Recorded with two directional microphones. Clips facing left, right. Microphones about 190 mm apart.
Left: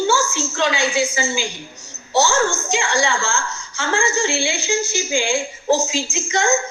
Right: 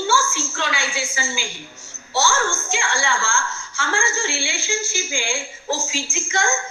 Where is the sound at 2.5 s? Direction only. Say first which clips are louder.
Left 4 dB; 40° left (ahead or behind).